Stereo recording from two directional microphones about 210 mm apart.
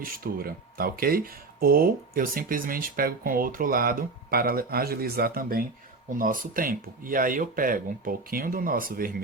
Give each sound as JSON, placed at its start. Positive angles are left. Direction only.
{"t": 0.0, "sound": "speech", "side_deg": -45}